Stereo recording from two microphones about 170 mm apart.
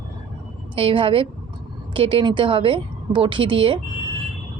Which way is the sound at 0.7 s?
30° right (ahead or behind).